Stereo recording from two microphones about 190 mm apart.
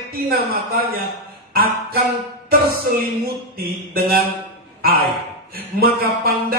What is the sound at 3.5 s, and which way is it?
Speech, 55° right (ahead or behind).